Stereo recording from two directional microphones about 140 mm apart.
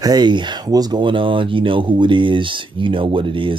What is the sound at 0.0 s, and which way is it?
Speech, 30° right (ahead or behind).